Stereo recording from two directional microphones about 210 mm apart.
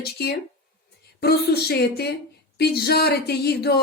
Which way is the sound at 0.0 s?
50° left (ahead or behind).